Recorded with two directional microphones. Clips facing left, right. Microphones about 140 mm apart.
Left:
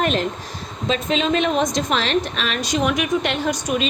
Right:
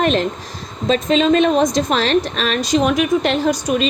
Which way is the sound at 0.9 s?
40° right (ahead or behind).